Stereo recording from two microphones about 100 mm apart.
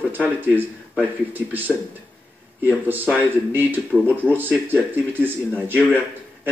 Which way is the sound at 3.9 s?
15° left (ahead or behind).